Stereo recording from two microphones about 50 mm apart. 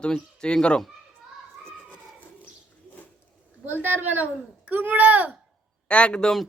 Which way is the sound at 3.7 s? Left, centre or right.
Right.